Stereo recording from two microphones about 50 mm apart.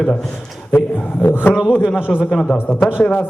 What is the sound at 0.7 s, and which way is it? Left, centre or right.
Music, left.